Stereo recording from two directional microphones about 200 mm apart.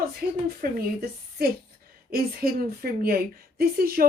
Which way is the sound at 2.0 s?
50° right (ahead or behind).